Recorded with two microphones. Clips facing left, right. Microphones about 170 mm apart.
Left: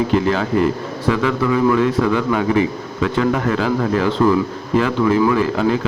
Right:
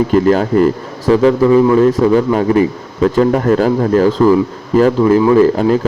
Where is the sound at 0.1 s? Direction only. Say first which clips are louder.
Right 6 dB; 45° right (ahead or behind).